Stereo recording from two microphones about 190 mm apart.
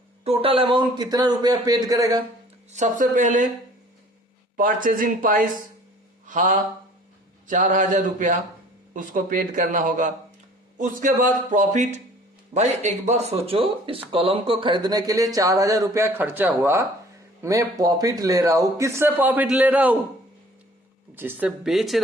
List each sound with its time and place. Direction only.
0.3 s speech: 30° right (ahead or behind)
2.7 s a man's voice: 40° right (ahead or behind)
4.5 s speech: 45° right (ahead or behind)
6.2 s a sound: 45° right (ahead or behind)
7.4 s a man's voice: 40° right (ahead or behind); by 20.0 s 10° right (ahead or behind)
21.2 s speech: 10° right (ahead or behind)